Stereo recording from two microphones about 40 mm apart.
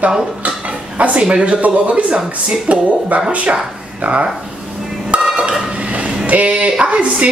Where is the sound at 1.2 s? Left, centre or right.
Right.